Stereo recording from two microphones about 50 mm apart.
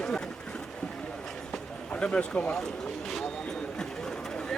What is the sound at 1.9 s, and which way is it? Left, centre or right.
Speech, centre.